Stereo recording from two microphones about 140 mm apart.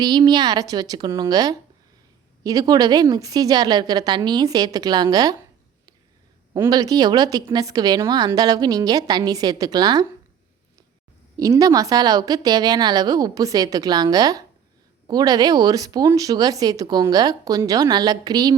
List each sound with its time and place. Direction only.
0.0 s a woman's voice: 30° right (ahead or behind)
6.7 s a woman's voice: 25° right (ahead or behind)
11.3 s a woman's voice: 25° right (ahead or behind)